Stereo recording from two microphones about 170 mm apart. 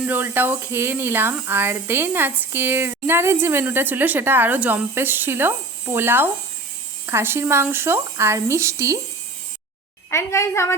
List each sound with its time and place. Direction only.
0.0 s speech: 10° right (ahead or behind)
10.1 s a woman's voice: 15° left (ahead or behind)